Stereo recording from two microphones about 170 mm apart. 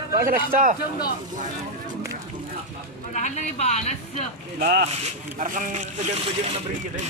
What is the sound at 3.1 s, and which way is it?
Speech, 45° left (ahead or behind).